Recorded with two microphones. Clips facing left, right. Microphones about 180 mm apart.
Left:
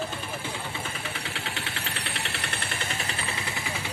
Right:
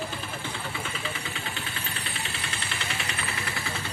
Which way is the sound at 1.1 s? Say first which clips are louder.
Left 1 dB; 75° left (ahead or behind).